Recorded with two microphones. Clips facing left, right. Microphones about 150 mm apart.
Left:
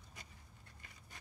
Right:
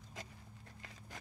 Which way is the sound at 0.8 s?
90° right.